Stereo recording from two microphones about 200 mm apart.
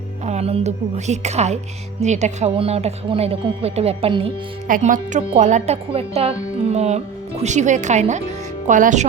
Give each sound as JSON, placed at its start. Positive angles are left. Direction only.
{"t": 0.3, "sound": "speech", "side_deg": -30}
{"t": 4.7, "sound": "speech", "side_deg": -40}